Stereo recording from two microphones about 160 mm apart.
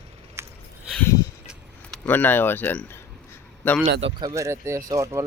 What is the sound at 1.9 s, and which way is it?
Speech, 10° left (ahead or behind).